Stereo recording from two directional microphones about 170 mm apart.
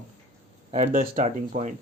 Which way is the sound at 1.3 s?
40° right (ahead or behind).